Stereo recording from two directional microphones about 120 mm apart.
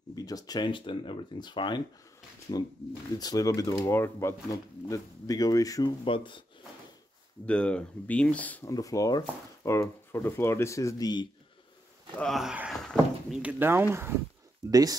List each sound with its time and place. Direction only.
0.1 s speech: 30° left (ahead or behind)
6.0 s speech: 45° left (ahead or behind)
7.4 s speech: 10° left (ahead or behind)
8.6 s speech: 25° left (ahead or behind)
12.2 s speech: centre (ahead or behind)
12.8 s a sound: centre (ahead or behind)
13.4 s speech: 15° right (ahead or behind)
14.7 s speech: 30° right (ahead or behind)